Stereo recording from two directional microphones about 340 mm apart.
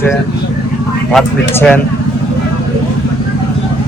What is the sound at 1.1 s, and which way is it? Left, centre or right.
Speech, centre.